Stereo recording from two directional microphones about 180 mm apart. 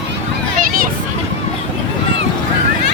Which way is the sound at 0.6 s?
55° right (ahead or behind).